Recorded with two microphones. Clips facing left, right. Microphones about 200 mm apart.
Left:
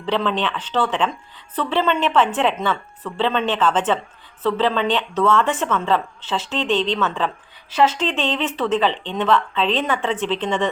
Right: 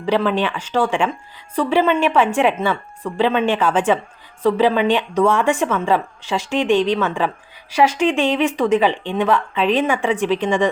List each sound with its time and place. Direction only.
0.0 s speech: 10° right (ahead or behind)